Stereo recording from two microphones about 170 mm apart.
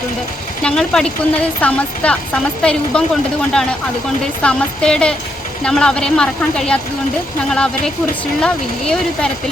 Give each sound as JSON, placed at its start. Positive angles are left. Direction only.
{"t": 0.6, "sound": "speech", "side_deg": 5}
{"t": 8.4, "sound": "speech", "side_deg": 5}